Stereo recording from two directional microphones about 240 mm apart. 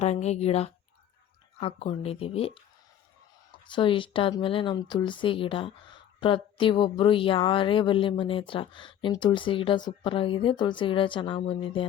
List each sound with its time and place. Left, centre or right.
0.0 s a woman's voice: left
3.5 s a woman's voice: left